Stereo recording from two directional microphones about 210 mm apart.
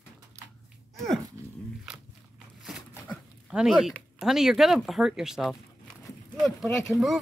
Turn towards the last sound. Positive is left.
turn(degrees=0)  # may be behind; listen again after turning